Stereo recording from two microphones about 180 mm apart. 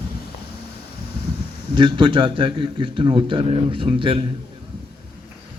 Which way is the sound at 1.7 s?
25° right (ahead or behind).